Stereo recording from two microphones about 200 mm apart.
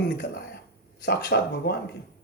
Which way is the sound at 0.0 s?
55° left (ahead or behind).